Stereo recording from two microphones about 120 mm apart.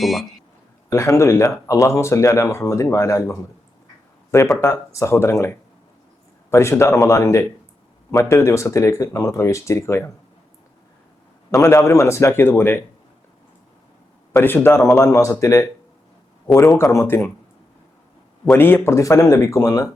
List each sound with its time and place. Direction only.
0.0 s a man's voice: centre (ahead or behind)
0.9 s speech: 25° left (ahead or behind)
4.6 s speech: 25° left (ahead or behind)
11.5 s speech: 25° left (ahead or behind)
14.3 s speech: 15° left (ahead or behind)
16.7 s speech: 25° left (ahead or behind)
18.5 s speech: 15° left (ahead or behind)